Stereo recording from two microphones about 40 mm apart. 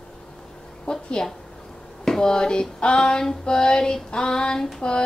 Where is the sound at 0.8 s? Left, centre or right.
Left.